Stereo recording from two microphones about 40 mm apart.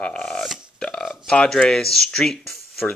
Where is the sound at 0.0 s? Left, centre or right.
Centre.